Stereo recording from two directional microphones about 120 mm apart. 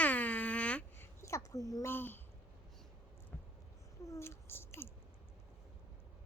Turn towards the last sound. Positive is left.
turn(degrees=20)  # may be behind; listen again after turning